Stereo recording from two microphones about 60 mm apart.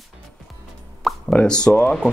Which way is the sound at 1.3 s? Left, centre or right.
Left.